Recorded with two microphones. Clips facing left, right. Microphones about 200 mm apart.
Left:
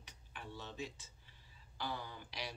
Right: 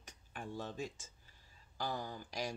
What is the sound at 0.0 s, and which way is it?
Cutlery, 45° right (ahead or behind).